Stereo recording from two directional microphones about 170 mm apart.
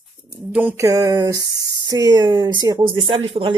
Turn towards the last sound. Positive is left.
turn(degrees=-35)  # may be behind; listen again after turning